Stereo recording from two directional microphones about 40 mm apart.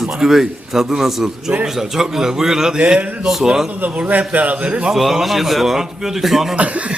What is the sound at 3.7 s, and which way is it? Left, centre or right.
Speech, right.